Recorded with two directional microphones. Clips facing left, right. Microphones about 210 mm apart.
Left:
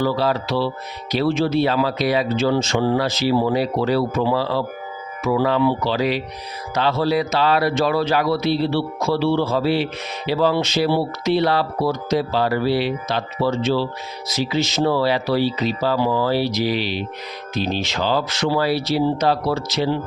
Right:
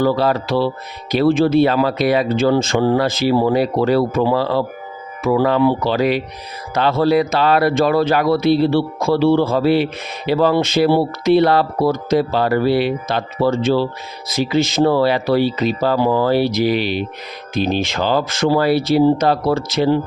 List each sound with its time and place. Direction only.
0.0 s speech: 55° right (ahead or behind)